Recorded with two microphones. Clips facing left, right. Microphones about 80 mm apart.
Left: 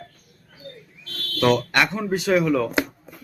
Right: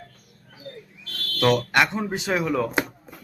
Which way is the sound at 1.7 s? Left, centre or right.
Centre.